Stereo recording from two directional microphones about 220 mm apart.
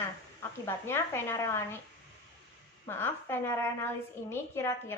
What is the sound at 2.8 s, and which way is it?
Speech, 10° left (ahead or behind).